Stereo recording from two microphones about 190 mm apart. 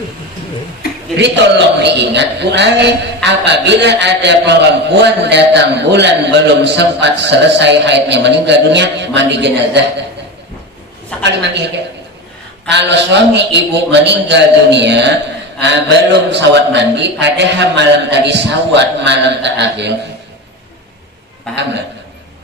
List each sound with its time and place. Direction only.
1.1 s a man's voice: 65° right (ahead or behind)
11.2 s a man's voice: 65° right (ahead or behind)
12.6 s a man's voice: 65° right (ahead or behind)